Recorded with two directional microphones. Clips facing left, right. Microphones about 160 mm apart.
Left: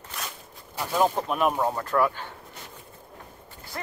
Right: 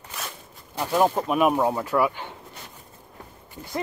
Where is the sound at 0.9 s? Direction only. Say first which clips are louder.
Right 3 dB; 10° right (ahead or behind).